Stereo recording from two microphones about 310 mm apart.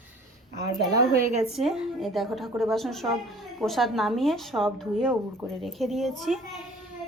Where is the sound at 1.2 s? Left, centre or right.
Right.